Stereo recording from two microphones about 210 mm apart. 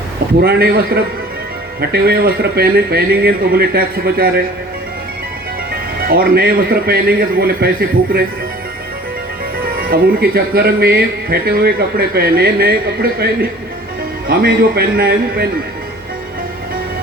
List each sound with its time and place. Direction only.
0.4 s speech: 45° right (ahead or behind)
6.1 s speech: 45° right (ahead or behind)
9.6 s speech: 45° right (ahead or behind)